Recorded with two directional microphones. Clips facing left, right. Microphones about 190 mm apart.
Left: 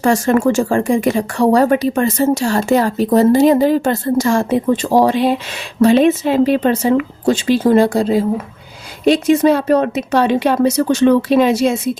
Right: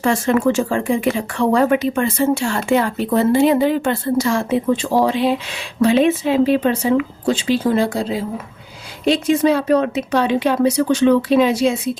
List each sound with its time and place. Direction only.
0.0 s speech: 45° left (ahead or behind)